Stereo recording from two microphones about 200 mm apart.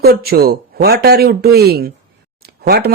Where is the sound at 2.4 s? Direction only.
50° right (ahead or behind).